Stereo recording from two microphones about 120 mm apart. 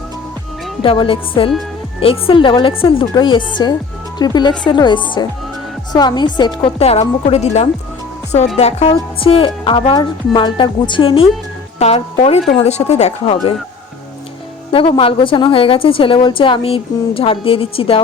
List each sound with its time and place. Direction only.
0.8 s a woman's voice: 45° left (ahead or behind)
6.7 s a woman's voice: 55° left (ahead or behind)
14.7 s a woman's voice: 45° left (ahead or behind)